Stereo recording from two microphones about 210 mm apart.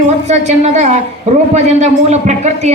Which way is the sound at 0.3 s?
35° right (ahead or behind).